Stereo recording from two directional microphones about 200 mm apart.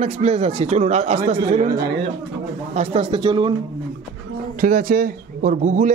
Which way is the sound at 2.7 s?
30° right (ahead or behind).